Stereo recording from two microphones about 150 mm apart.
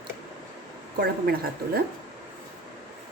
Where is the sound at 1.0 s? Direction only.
90° right.